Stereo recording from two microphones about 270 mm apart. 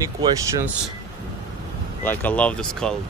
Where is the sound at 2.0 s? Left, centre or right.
Centre.